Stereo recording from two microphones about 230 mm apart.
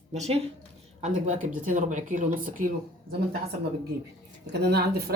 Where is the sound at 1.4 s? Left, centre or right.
Right.